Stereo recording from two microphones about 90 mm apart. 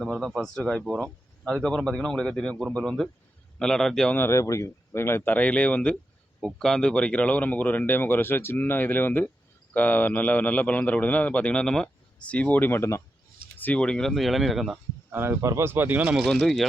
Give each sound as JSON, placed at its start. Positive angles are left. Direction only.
{"t": 0.0, "sound": "a man's voice", "side_deg": 5}
{"t": 4.1, "sound": "a man's voice", "side_deg": 30}
{"t": 15.1, "sound": "speech", "side_deg": -25}
{"t": 16.2, "sound": "speech", "side_deg": 5}